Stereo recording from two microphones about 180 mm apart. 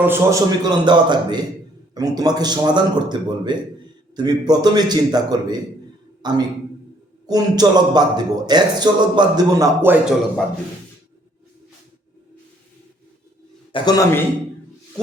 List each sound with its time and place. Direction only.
0.0 s speech: 15° right (ahead or behind)
13.7 s a man's voice: 20° left (ahead or behind)